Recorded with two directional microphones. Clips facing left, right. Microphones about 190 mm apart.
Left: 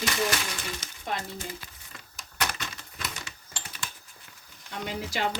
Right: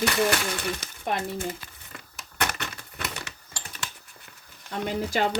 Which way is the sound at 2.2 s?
60° right (ahead or behind).